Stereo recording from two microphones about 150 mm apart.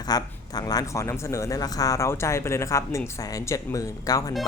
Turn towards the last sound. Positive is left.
turn(degrees=25)  # may be behind; listen again after turning